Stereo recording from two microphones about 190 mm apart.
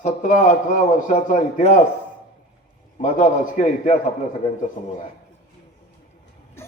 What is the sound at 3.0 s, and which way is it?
A man's voice, 40° left (ahead or behind).